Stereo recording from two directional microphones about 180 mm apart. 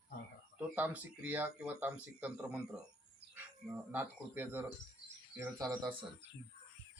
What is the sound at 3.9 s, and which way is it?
Speech, 10° right (ahead or behind).